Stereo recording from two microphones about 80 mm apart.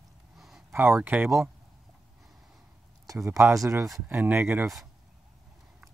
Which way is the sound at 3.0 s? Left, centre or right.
Right.